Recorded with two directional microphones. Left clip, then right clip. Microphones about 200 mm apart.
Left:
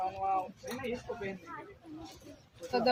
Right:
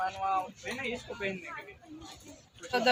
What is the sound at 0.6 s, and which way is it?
Speech, 20° right (ahead or behind).